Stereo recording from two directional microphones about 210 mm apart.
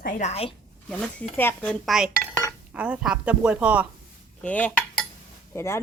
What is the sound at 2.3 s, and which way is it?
Cutlery, 10° left (ahead or behind).